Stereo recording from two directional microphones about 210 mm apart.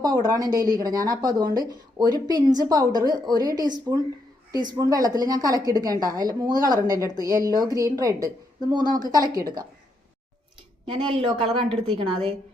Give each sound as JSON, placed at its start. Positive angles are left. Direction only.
{"t": 0.0, "sound": "a woman's voice", "side_deg": -15}
{"t": 10.8, "sound": "a woman's voice", "side_deg": -25}